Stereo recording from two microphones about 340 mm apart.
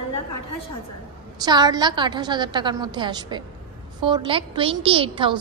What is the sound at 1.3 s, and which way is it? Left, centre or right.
A woman's voice, centre.